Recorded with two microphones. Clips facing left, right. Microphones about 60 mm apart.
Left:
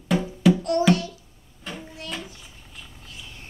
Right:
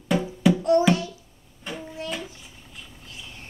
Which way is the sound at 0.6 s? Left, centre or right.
Right.